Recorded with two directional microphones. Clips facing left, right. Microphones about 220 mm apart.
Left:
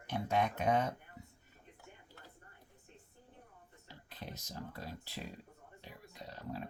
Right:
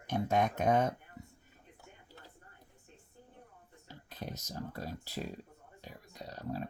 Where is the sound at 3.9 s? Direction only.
45° right (ahead or behind).